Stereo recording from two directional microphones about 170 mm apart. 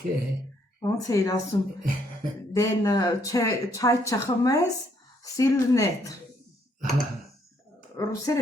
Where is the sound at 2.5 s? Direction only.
20° left (ahead or behind).